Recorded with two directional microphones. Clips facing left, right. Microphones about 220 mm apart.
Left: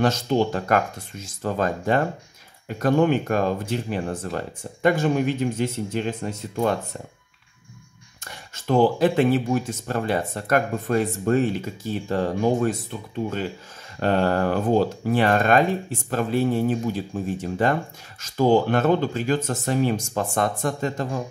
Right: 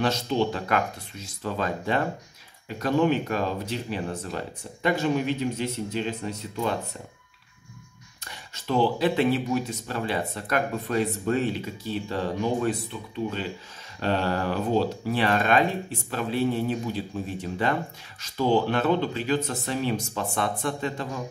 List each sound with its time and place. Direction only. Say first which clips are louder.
0.0 s speech: left 4 dB; 45° left (ahead or behind)
8.2 s speech: left 3 dB; 50° left (ahead or behind)
13.9 s speech: left 5 dB; 50° left (ahead or behind)